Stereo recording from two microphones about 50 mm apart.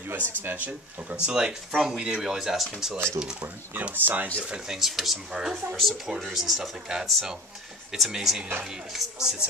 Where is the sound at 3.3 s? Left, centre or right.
Right.